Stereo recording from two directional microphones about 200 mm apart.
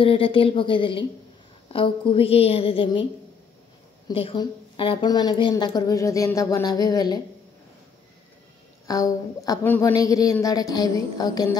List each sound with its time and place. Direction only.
0.0 s speech: 25° left (ahead or behind)
4.1 s speech: 25° left (ahead or behind)
8.8 s a woman's voice: 15° left (ahead or behind)